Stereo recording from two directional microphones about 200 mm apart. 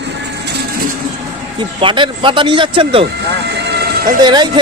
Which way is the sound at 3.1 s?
60° right (ahead or behind).